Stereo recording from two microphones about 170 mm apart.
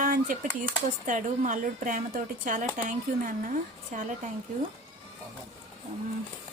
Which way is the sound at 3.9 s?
50° right (ahead or behind).